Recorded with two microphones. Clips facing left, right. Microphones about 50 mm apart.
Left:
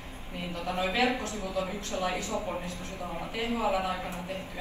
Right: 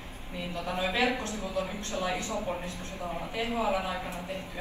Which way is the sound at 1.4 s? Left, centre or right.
Left.